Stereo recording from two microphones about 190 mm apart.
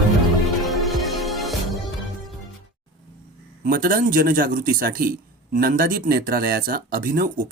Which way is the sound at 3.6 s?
45° right (ahead or behind).